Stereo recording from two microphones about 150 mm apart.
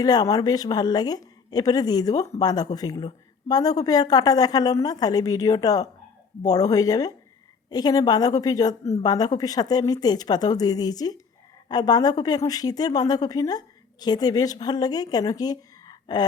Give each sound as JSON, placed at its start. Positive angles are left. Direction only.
{"t": 0.0, "sound": "speech", "side_deg": 25}